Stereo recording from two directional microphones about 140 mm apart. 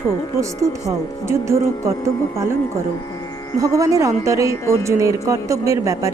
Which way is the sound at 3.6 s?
25° right (ahead or behind).